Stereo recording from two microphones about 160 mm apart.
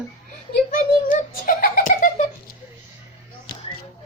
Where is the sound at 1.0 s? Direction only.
60° left (ahead or behind).